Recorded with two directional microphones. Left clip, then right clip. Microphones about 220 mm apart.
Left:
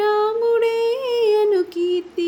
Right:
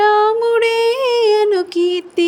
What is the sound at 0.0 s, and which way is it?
Female singing, 35° right (ahead or behind).